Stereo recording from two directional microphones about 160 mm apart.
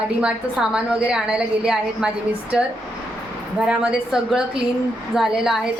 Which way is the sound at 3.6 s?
5° right (ahead or behind).